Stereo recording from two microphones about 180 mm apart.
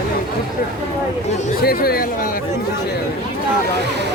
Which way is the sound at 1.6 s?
55° left (ahead or behind).